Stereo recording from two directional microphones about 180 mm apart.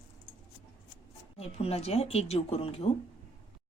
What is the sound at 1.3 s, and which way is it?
Speech, 35° left (ahead or behind).